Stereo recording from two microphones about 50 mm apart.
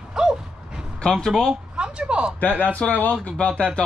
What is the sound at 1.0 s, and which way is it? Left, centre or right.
Speech, centre.